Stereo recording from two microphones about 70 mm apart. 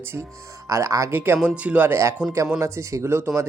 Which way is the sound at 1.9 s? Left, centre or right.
Right.